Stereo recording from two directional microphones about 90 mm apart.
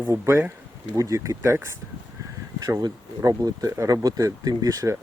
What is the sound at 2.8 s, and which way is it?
Speech, 45° right (ahead or behind).